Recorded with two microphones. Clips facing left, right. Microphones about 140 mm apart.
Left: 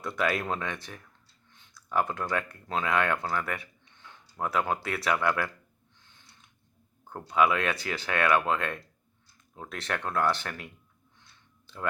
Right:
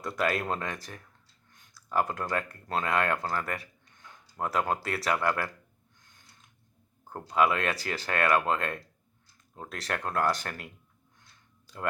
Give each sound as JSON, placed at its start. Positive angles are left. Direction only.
{"t": 0.2, "sound": "speech", "side_deg": -40}
{"t": 6.0, "sound": "a sound", "side_deg": -40}
{"t": 7.3, "sound": "speech", "side_deg": -35}